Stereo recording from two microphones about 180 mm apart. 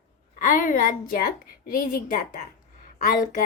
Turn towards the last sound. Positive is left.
turn(degrees=50)  # may be behind; listen again after turning